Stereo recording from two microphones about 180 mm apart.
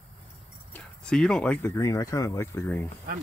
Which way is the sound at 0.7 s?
5° left (ahead or behind).